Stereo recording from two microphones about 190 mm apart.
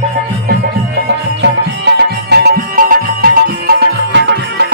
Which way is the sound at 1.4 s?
65° right (ahead or behind).